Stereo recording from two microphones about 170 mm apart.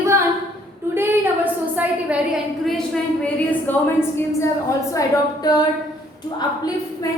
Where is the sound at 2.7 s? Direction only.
5° left (ahead or behind).